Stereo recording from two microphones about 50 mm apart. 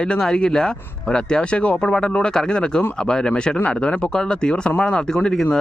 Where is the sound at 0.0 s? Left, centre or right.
Centre.